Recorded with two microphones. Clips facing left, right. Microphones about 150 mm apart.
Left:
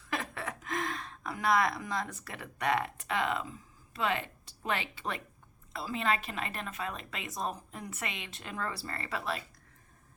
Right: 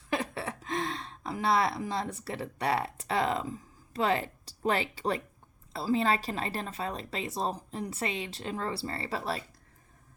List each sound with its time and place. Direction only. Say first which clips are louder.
0.1 s a woman's voice: right 4 dB; 30° right (ahead or behind)